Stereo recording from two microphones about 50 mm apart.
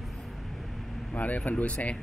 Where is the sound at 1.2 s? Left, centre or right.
Left.